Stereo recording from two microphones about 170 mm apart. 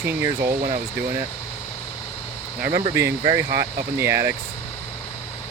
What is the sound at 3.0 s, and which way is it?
Speech, 15° right (ahead or behind).